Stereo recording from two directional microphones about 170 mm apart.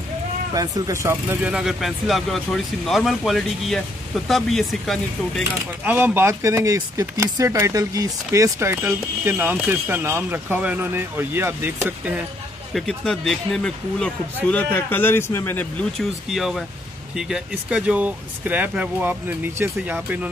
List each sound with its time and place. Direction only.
0.6 s speech: 20° right (ahead or behind)
1.4 s a man's voice: 5° right (ahead or behind)
5.9 s speech: 10° right (ahead or behind)
12.7 s a man's voice: 5° left (ahead or behind)
16.0 s a man's voice: centre (ahead or behind)